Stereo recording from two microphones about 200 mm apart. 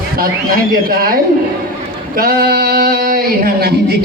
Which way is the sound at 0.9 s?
50° right (ahead or behind).